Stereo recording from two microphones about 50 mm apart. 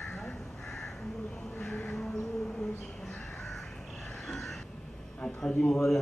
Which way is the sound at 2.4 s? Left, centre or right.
Centre.